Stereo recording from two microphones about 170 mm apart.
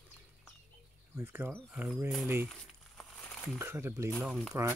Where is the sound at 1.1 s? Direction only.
10° right (ahead or behind).